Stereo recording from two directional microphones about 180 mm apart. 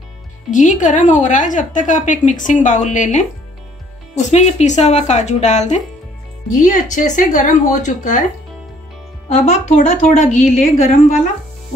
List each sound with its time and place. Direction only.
0.5 s a woman's voice: 45° left (ahead or behind)
9.3 s a woman's voice: 40° left (ahead or behind)